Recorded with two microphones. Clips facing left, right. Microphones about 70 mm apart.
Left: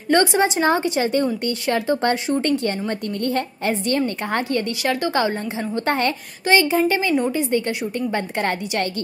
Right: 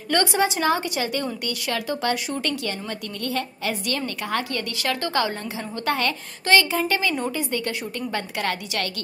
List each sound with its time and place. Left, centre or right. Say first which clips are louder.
0.1 s a woman's voice: left 4 dB; left
6.4 s a woman's voice: left 3 dB; left